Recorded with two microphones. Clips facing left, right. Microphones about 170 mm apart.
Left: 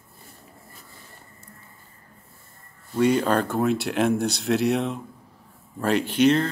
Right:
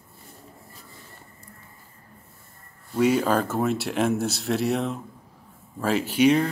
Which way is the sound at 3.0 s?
5° right (ahead or behind).